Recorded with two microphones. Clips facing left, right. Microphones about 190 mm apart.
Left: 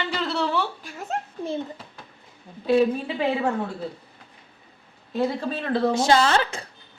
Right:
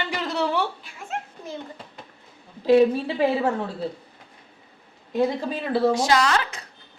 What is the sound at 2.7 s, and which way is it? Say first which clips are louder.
Speech: right 3 dB; 30° right (ahead or behind).